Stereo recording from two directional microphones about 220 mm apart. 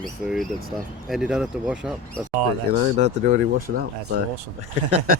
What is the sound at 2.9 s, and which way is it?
Speech, 35° right (ahead or behind).